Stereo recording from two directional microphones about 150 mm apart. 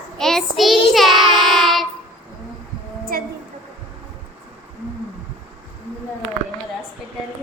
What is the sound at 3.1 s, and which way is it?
Speech, 70° right (ahead or behind).